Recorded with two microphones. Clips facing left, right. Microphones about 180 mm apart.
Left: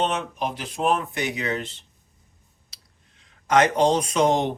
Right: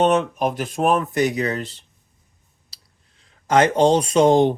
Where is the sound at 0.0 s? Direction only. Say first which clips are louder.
Right 8 dB; 50° right (ahead or behind).